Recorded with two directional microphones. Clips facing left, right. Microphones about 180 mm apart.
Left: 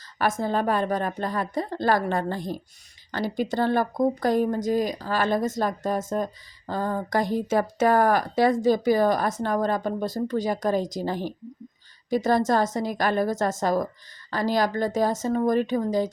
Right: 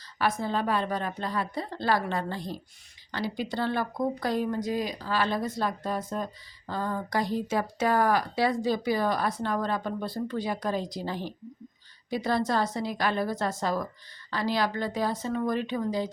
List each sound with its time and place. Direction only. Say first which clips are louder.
0.2 s speech: left 3 dB; 45° left (ahead or behind)